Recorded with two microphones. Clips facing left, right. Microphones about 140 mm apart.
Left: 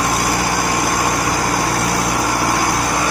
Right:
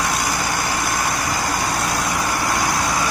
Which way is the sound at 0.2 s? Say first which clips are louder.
Left 4 dB; 70° left (ahead or behind).